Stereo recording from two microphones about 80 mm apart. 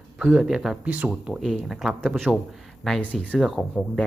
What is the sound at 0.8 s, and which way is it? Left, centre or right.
Speech, centre.